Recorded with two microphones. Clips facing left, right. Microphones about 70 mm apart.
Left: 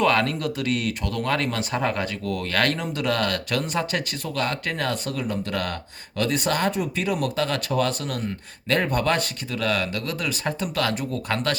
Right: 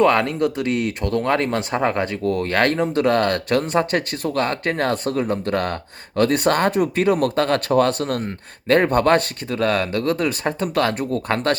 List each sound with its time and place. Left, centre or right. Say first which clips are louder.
0.0 s speech: right 5 dB; right